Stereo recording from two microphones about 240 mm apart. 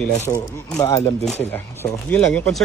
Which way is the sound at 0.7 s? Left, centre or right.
Centre.